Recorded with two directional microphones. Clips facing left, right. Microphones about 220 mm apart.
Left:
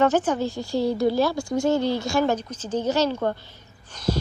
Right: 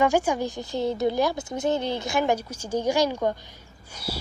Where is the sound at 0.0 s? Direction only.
10° right (ahead or behind).